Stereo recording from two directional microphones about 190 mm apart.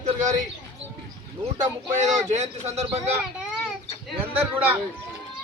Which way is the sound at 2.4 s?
35° right (ahead or behind).